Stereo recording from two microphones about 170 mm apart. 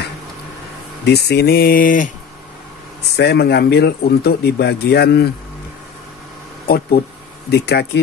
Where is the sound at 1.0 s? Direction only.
75° left (ahead or behind); by 2.1 s 50° left (ahead or behind).